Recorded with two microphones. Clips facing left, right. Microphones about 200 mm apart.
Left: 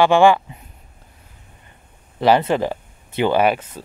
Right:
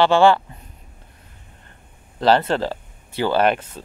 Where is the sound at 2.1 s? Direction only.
10° left (ahead or behind).